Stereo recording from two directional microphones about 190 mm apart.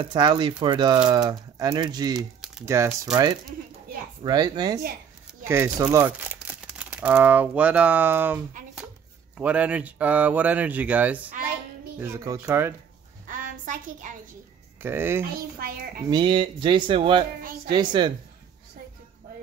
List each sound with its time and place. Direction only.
0.0 s speech: 25° right (ahead or behind)
4.2 s speech: 20° right (ahead or behind)
9.4 s speech: 5° right (ahead or behind)
13.3 s a sound: 45° right (ahead or behind)
14.8 s speech: 10° right (ahead or behind)
15.6 s a woman's voice: 50° right (ahead or behind)
16.1 s speech: 25° right (ahead or behind)